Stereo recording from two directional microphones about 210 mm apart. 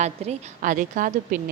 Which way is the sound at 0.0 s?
30° right (ahead or behind).